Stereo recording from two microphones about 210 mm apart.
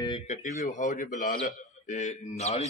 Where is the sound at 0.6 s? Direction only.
35° left (ahead or behind).